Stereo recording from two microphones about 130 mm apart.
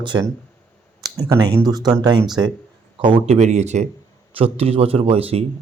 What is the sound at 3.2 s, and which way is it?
Speech, 60° right (ahead or behind).